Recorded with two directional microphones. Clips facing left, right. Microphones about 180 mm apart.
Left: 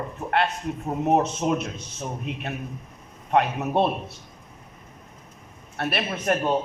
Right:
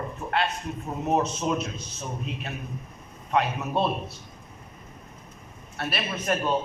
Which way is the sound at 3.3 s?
55° left (ahead or behind).